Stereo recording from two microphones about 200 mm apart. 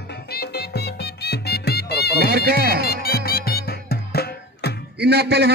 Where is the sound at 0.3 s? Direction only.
55° left (ahead or behind).